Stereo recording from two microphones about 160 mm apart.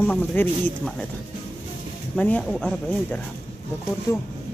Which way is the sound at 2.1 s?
5° left (ahead or behind).